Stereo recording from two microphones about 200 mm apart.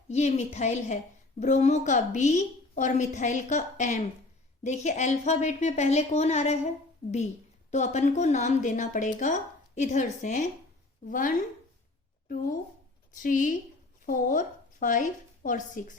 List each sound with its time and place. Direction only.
0.1 s speech: 35° left (ahead or behind)
7.7 s speech: 35° left (ahead or behind)
13.2 s a woman's voice: 40° left (ahead or behind)